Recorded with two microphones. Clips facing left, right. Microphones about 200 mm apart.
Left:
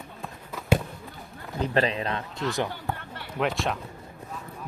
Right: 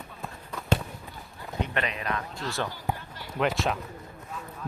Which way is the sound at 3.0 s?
60° left (ahead or behind).